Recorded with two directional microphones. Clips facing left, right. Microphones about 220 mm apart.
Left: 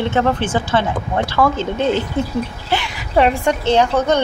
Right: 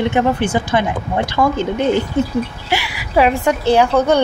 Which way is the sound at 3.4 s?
20° left (ahead or behind).